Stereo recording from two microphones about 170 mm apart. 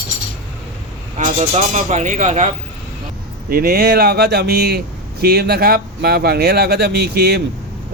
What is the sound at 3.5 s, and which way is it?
Speech, 65° right (ahead or behind).